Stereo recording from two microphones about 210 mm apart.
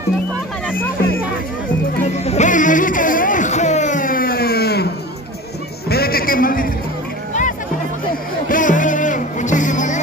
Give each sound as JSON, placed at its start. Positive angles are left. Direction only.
{"t": 0.7, "sound": "music", "side_deg": 10}
{"t": 2.0, "sound": "music", "side_deg": 30}
{"t": 5.9, "sound": "a sound", "side_deg": 45}
{"t": 8.1, "sound": "music", "side_deg": 40}